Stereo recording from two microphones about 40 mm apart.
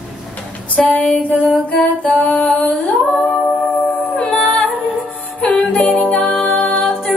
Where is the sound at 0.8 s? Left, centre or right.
Left.